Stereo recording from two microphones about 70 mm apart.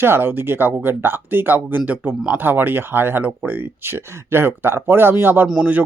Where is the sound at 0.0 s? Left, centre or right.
Right.